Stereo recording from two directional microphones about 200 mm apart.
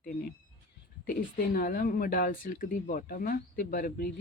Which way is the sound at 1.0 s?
45° left (ahead or behind).